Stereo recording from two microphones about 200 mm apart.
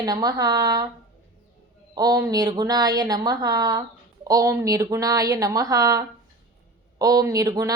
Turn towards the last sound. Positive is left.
turn(degrees=-15)  # may be behind; listen again after turning